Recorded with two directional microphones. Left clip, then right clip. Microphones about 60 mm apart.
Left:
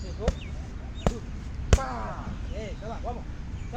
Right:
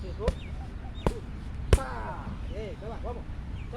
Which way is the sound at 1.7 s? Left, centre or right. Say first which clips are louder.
Left 1 dB; centre.